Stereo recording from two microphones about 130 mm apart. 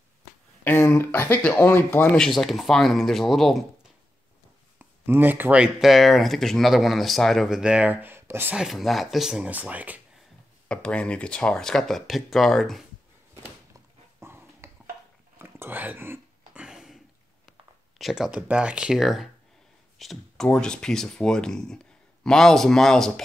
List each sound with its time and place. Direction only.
0.7 s speech: 20° left (ahead or behind)
2.1 s speech: 5° left (ahead or behind)
4.7 s speech: 15° right (ahead or behind)
8.5 s speech: centre (ahead or behind)
10.7 s speech: 10° left (ahead or behind)
14.2 s dog: 20° right (ahead or behind)
15.3 s a sound: 15° right (ahead or behind)
16.6 s a sound: 5° right (ahead or behind)
17.5 s speech: centre (ahead or behind)